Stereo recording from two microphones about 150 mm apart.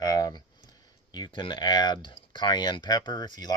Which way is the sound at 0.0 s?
25° left (ahead or behind).